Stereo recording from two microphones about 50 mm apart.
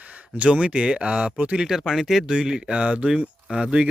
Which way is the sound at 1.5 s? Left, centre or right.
Centre.